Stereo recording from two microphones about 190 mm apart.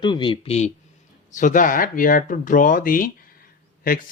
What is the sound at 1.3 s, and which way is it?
Speech, 45° left (ahead or behind).